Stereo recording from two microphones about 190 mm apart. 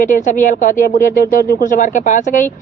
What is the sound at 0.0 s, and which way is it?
Speech, 45° left (ahead or behind).